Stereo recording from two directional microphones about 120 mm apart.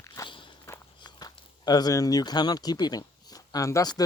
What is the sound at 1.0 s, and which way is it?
Speech, 35° left (ahead or behind).